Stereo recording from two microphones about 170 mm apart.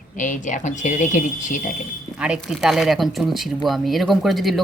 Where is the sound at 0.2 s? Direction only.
50° left (ahead or behind).